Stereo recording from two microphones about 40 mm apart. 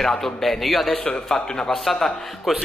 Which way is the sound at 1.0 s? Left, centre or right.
Left.